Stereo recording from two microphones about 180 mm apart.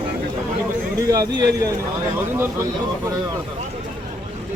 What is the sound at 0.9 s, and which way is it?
A man's voice, 20° right (ahead or behind).